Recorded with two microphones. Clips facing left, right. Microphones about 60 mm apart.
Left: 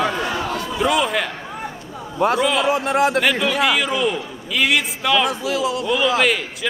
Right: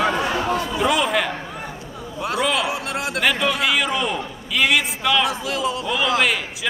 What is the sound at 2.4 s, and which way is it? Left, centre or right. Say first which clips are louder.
A man's voice: left 4 dB; centre.